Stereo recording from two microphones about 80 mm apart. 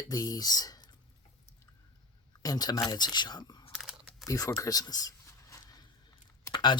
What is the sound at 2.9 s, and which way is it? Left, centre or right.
Speech, left.